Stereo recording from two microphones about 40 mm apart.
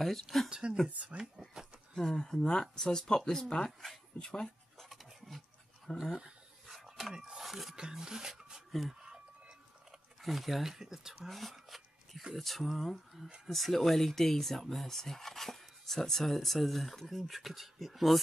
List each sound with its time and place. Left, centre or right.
0.0 s speech: centre
0.5 s speech: right
0.8 s speech: right
2.0 s speech: centre
4.7 s a sound: centre
5.9 s speech: centre
6.7 s dog: centre
7.2 s a sound: centre
7.4 s music: centre
7.9 s speech: centre
10.2 s speech: centre
11.2 s a sound: centre
12.4 s speech: centre